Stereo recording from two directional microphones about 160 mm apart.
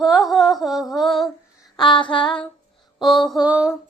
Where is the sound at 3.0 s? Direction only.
Centre (ahead or behind).